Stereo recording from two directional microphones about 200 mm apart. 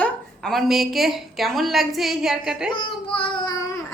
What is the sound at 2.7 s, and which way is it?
Child singing, 25° left (ahead or behind).